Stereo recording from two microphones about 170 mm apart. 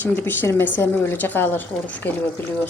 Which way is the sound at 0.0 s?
10° left (ahead or behind).